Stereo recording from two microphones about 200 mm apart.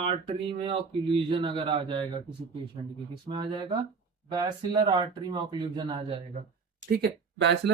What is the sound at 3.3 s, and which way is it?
Speech, 25° right (ahead or behind).